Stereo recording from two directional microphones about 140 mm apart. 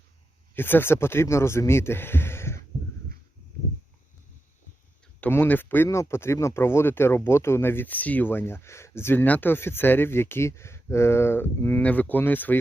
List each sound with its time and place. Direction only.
0.5 s speech: 15° left (ahead or behind)
5.2 s speech: 15° left (ahead or behind)